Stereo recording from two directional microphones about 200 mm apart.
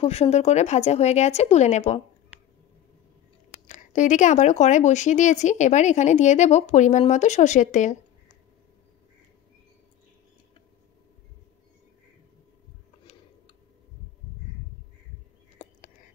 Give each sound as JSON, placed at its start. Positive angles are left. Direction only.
{"t": 0.0, "sound": "speech", "side_deg": 30}
{"t": 3.6, "sound": "speech", "side_deg": 35}